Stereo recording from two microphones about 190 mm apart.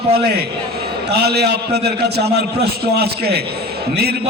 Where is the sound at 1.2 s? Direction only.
60° right (ahead or behind).